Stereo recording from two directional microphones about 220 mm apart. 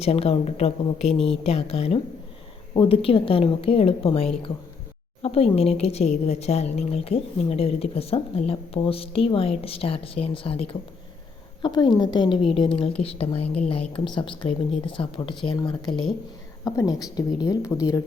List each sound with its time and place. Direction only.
0.0 s a woman's voice: 25° left (ahead or behind)